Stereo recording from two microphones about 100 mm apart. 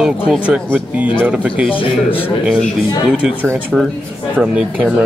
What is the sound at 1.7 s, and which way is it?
Speech, 65° left (ahead or behind).